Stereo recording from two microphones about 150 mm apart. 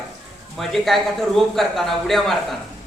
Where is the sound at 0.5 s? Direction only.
Centre (ahead or behind).